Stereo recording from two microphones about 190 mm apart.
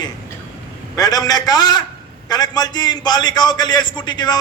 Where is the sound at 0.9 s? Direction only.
20° left (ahead or behind).